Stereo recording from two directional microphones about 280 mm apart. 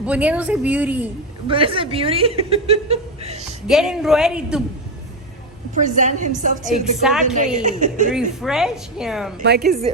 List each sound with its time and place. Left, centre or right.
0.0 s a woman's voice: centre
1.5 s speech: centre
3.7 s a woman's voice: centre
5.8 s speech: right
7.0 s a woman's voice: centre
7.5 s speech: right
8.1 s a woman's voice: centre